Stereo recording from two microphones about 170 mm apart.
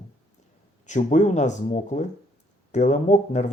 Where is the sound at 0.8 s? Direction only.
45° left (ahead or behind).